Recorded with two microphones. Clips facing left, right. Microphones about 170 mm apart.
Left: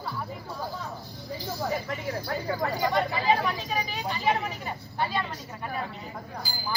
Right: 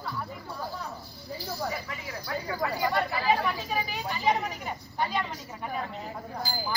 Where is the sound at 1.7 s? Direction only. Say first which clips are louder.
Left 6 dB; 45° left (ahead or behind).